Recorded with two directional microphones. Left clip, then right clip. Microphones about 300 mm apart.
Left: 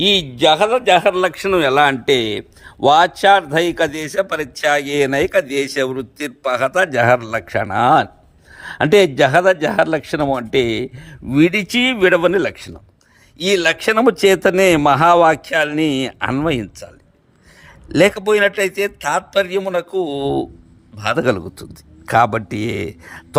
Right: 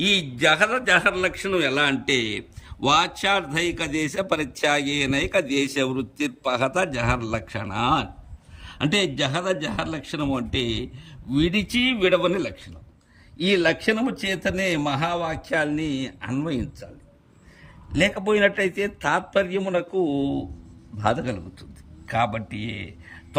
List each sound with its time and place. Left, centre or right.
0.0 s a man's voice: centre
0.3 s a man's voice: left
0.8 s a man's voice: centre
17.9 s a man's voice: centre